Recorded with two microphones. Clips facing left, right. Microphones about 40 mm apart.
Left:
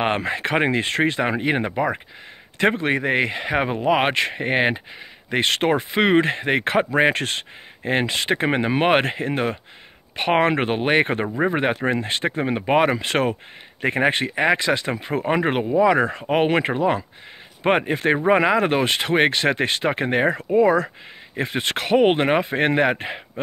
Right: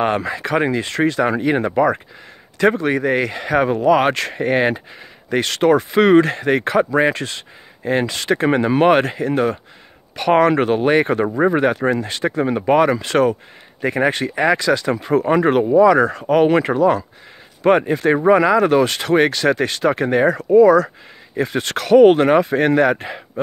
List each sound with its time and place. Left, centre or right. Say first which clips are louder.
0.0 s speech: right 3 dB; left
6.6 s speech: right 1 dB; left